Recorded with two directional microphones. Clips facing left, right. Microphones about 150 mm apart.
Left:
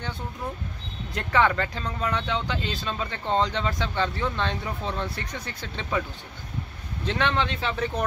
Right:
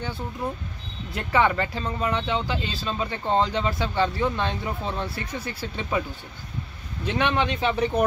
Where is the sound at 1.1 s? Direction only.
10° right (ahead or behind).